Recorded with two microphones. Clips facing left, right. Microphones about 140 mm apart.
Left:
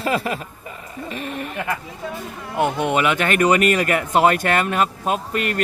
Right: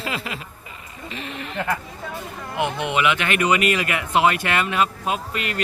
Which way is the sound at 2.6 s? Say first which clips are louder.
Left 3 dB; 45° left (ahead or behind).